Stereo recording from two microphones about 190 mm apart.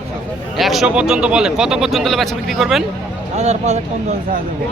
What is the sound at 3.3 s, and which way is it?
Speech, 35° right (ahead or behind).